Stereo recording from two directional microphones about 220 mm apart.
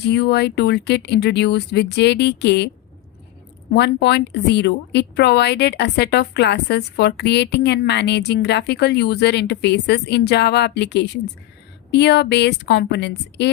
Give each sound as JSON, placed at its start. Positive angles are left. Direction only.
{"t": 0.0, "sound": "speech", "side_deg": 50}
{"t": 3.7, "sound": "speech", "side_deg": 50}